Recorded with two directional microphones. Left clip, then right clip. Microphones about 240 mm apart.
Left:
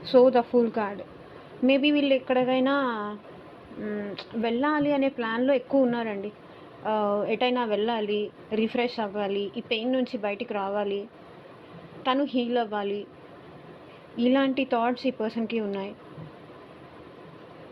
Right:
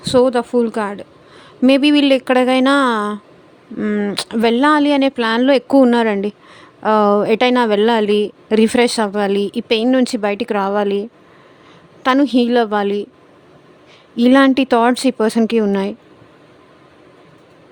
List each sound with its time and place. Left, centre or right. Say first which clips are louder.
0.0 s speech: right 5 dB; right
1.6 s a woman's voice: right 10 dB; right
12.0 s a woman's voice: right 12 dB; right
14.2 s a woman's voice: right 12 dB; right